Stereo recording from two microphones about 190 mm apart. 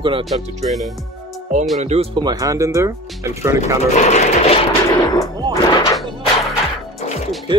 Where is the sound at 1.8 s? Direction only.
35° right (ahead or behind); by 3.6 s 15° right (ahead or behind).